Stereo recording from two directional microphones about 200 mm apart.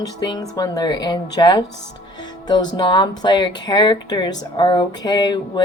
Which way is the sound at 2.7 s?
20° left (ahead or behind).